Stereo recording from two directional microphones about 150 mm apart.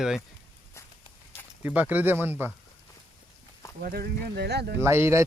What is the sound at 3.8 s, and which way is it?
Speech, 90° right.